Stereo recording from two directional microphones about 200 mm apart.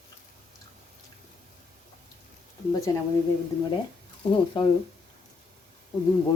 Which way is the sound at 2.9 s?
20° left (ahead or behind).